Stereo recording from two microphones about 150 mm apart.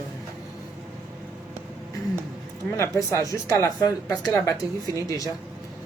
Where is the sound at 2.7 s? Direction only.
15° left (ahead or behind).